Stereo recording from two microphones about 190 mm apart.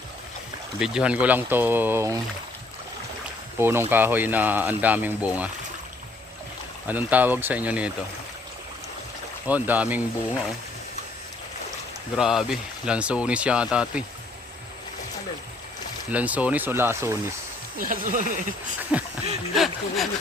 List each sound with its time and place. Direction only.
0.8 s speech: 5° right (ahead or behind)
3.6 s speech: 10° right (ahead or behind)
6.8 s speech: 10° right (ahead or behind)
9.5 s speech: 10° right (ahead or behind)
12.1 s speech: centre (ahead or behind)
16.1 s speech: 10° right (ahead or behind)
17.7 s speech: 45° right (ahead or behind)
18.8 s speech: 5° right (ahead or behind)